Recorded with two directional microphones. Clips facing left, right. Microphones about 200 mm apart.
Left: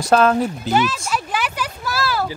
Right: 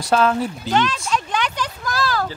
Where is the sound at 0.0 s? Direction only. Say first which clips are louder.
Left 3 dB; 50° left (ahead or behind).